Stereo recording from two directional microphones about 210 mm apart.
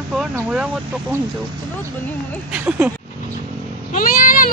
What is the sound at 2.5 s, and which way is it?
Speech, 5° right (ahead or behind).